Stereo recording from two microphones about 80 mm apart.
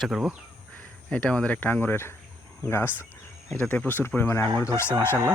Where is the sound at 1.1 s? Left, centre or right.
Centre; by 2.9 s left.